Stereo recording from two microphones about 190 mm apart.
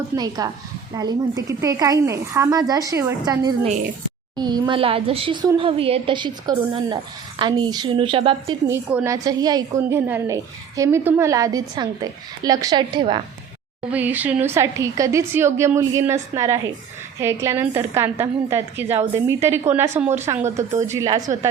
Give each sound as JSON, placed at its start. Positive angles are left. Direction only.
{"t": 0.2, "sound": "a woman's voice", "side_deg": -20}
{"t": 8.6, "sound": "a woman's voice", "side_deg": -10}
{"t": 13.9, "sound": "a woman's voice", "side_deg": -10}
{"t": 20.3, "sound": "speech", "side_deg": -35}
{"t": 20.9, "sound": "a woman's voice", "side_deg": -20}